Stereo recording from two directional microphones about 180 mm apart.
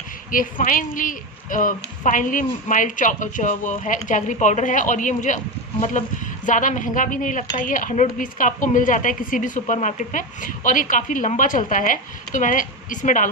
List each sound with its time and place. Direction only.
0.3 s speech: 50° left (ahead or behind)